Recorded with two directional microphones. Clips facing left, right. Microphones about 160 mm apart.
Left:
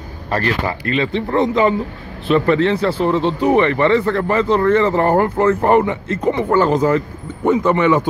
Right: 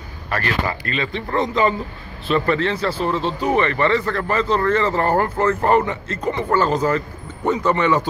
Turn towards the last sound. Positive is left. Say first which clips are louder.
# left 4 dB
turn(degrees=15)  # may be behind; listen again after turning